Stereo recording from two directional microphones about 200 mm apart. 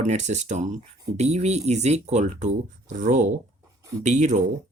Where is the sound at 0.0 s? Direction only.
35° right (ahead or behind).